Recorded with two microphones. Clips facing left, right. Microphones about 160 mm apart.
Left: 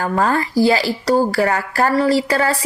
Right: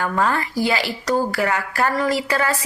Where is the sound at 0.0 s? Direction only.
40° left (ahead or behind).